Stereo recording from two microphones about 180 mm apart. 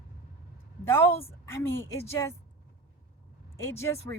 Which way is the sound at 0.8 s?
15° left (ahead or behind).